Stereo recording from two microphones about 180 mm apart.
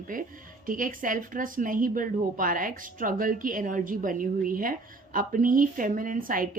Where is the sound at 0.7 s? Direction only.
50° right (ahead or behind).